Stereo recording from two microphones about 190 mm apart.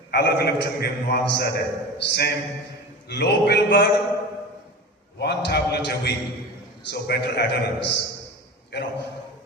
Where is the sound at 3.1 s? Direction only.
60° left (ahead or behind).